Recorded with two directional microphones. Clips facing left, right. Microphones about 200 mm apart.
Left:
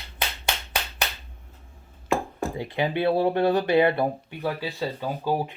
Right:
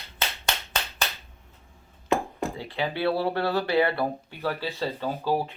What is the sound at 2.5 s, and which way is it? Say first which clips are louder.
Speech: left 6 dB; 20° left (ahead or behind).